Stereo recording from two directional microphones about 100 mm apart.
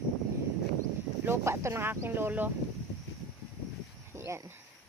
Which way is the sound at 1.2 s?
25° right (ahead or behind).